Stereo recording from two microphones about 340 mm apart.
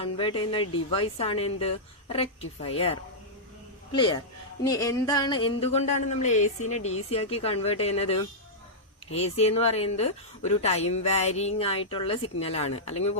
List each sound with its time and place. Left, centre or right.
0.0 s speech: centre